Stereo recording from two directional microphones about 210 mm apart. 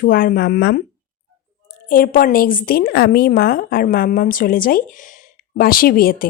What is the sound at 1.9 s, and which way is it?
A woman's voice, 40° left (ahead or behind).